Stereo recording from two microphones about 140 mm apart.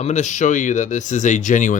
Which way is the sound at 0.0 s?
55° left (ahead or behind).